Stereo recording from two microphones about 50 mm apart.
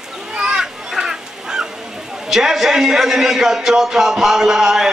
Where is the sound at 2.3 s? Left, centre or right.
Centre.